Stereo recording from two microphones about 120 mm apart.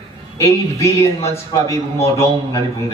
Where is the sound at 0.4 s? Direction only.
25° left (ahead or behind).